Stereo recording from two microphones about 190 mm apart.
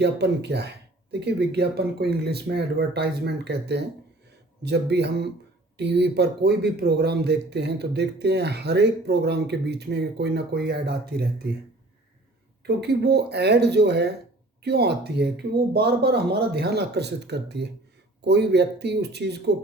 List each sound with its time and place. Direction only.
0.0 s speech: 60° right (ahead or behind)
12.6 s speech: 60° right (ahead or behind)